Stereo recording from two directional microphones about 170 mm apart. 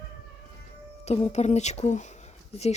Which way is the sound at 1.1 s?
40° left (ahead or behind).